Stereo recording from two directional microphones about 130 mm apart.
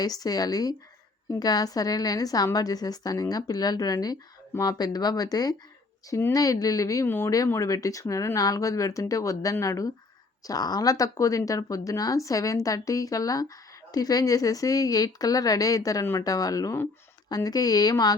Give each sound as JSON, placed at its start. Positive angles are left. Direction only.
{"t": 0.0, "sound": "a woman's voice", "side_deg": 30}